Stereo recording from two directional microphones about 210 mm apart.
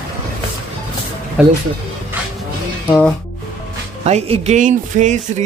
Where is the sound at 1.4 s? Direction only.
5° right (ahead or behind).